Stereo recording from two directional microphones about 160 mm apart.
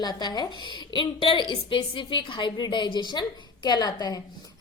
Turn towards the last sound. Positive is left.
turn(degrees=25)  # may be behind; listen again after turning